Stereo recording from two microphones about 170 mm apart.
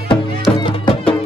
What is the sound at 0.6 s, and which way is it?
Music, 30° left (ahead or behind).